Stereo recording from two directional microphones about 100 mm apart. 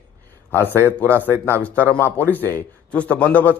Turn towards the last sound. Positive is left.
turn(degrees=15)  # may be behind; listen again after turning